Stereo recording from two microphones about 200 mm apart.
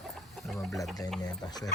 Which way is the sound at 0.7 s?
Centre (ahead or behind).